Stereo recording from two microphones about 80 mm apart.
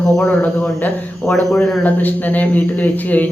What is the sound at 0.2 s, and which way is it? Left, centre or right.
A man's voice, centre.